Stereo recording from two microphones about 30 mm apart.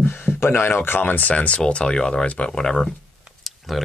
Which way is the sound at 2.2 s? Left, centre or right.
Left.